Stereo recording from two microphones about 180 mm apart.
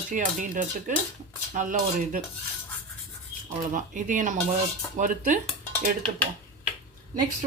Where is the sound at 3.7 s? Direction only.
45° right (ahead or behind).